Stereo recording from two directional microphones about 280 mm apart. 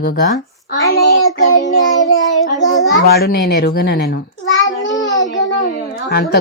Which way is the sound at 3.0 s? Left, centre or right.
Left.